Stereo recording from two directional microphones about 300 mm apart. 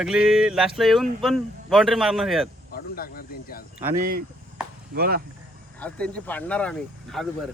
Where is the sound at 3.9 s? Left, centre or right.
Right.